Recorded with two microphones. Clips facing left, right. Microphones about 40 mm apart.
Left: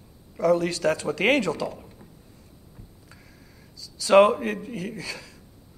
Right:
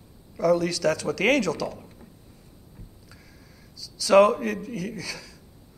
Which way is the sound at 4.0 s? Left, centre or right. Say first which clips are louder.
Left 1 dB; left.